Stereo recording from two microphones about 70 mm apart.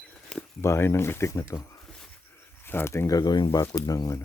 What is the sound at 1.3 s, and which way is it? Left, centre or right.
Speech, left.